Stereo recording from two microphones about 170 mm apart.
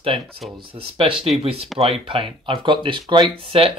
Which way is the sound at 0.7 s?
30° right (ahead or behind).